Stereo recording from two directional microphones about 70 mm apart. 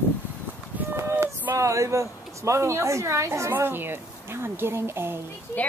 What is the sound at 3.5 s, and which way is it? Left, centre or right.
A woman's voice, right.